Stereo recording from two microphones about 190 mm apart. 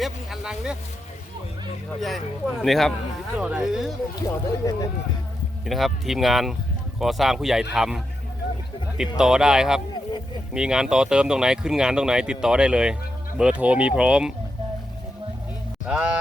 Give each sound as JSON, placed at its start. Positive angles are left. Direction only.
{"t": 0.0, "sound": "speech", "side_deg": 0}
{"t": 2.0, "sound": "speech", "side_deg": 0}
{"t": 4.3, "sound": "speech", "side_deg": 20}
{"t": 5.6, "sound": "speech", "side_deg": 0}
{"t": 9.1, "sound": "speech", "side_deg": -5}
{"t": 15.9, "sound": "speech", "side_deg": -5}